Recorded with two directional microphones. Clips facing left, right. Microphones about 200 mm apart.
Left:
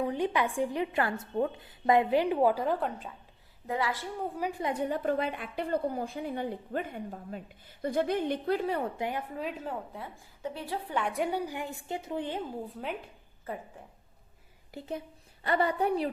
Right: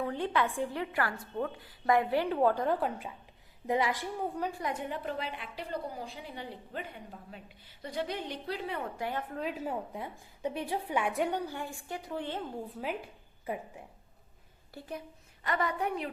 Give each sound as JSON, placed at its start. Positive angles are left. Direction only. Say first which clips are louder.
{"t": 0.0, "sound": "a woman's voice", "louder": "left 2 dB", "side_deg": 15}
{"t": 3.7, "sound": "a woman's voice", "louder": "right 2 dB", "side_deg": -20}
{"t": 4.2, "sound": "a woman's voice", "louder": "left 3 dB", "side_deg": 10}
{"t": 4.6, "sound": "a woman's voice", "louder": "left 5 dB", "side_deg": 35}
{"t": 9.0, "sound": "a woman's voice", "louder": "left 2 dB", "side_deg": 15}
{"t": 9.3, "sound": "a woman's voice", "louder": "right 1 dB", "side_deg": 0}
{"t": 12.6, "sound": "a woman's voice", "louder": "even", "side_deg": 0}
{"t": 14.7, "sound": "a woman's voice", "louder": "left 4 dB", "side_deg": 20}